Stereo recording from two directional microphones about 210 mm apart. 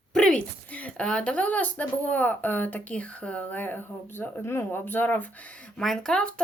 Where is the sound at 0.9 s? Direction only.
5° left (ahead or behind).